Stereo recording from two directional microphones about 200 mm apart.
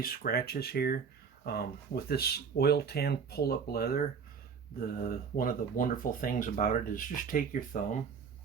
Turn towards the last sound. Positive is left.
turn(degrees=40)  # may be behind; listen again after turning